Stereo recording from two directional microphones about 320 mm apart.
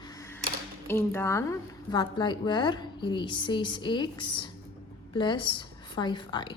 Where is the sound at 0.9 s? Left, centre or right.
Centre.